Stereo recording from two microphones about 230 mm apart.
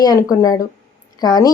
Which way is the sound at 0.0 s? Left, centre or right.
Centre.